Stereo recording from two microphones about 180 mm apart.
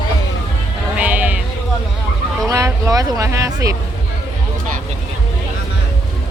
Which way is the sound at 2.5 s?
15° right (ahead or behind).